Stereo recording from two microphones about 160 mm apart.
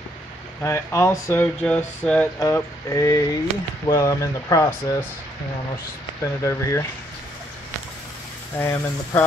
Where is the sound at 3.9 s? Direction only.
20° left (ahead or behind).